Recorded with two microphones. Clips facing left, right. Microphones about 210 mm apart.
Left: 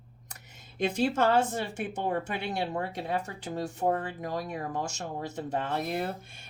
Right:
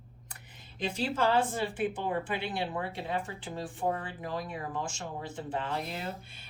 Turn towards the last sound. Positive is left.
turn(degrees=50)  # may be behind; listen again after turning